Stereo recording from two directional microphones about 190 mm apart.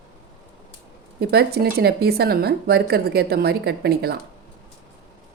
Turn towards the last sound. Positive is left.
turn(degrees=-55)  # may be behind; listen again after turning